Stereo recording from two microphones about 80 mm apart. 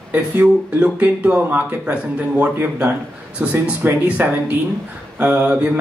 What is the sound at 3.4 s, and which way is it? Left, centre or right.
Speech, centre.